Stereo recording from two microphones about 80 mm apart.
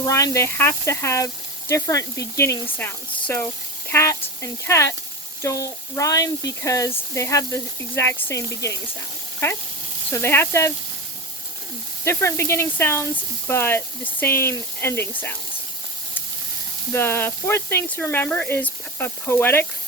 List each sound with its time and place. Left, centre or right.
0.1 s speech: left
2.6 s speech: left
10.1 s speech: left
12.0 s speech: left
16.9 s speech: left